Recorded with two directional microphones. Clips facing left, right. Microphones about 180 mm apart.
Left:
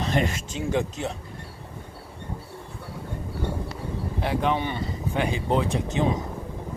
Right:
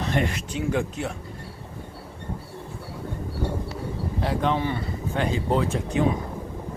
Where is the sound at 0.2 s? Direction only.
25° left (ahead or behind).